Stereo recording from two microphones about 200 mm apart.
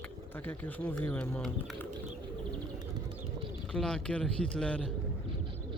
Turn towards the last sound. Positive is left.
turn(degrees=5)  # may be behind; listen again after turning